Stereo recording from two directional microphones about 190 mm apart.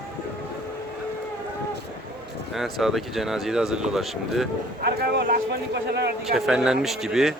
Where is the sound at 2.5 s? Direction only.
Centre (ahead or behind).